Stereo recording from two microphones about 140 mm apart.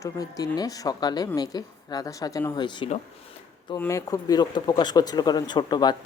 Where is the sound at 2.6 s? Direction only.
35° left (ahead or behind).